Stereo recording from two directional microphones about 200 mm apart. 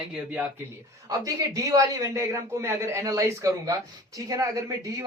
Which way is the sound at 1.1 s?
20° right (ahead or behind).